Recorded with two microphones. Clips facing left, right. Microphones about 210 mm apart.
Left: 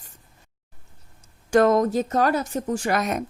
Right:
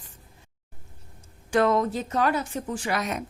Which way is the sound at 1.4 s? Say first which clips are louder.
Left 4 dB; 45° left (ahead or behind).